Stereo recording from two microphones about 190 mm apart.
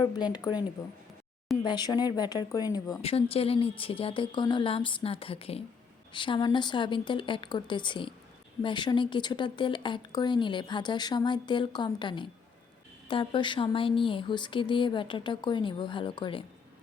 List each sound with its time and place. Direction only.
0.0 s speech: 20° left (ahead or behind)
1.6 s speech: 20° left (ahead or behind)
3.0 s speech: 30° left (ahead or behind)